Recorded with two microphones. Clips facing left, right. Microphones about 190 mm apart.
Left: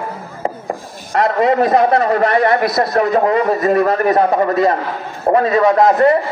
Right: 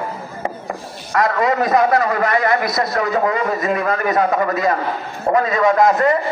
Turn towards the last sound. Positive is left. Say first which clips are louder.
# left 3 dB
turn(degrees=30)  # may be behind; listen again after turning